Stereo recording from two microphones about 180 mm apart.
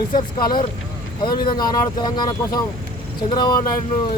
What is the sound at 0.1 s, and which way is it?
Speech, 25° left (ahead or behind).